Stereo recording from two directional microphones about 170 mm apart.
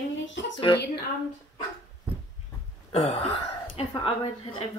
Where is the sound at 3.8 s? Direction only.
35° left (ahead or behind).